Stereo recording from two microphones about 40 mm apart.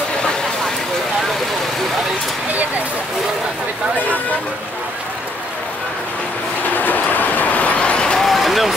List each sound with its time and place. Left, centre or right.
6.7 s vehicle: left
8.2 s vehicle: centre